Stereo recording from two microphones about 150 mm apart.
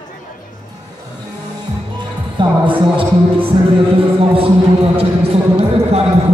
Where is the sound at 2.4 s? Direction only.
35° right (ahead or behind).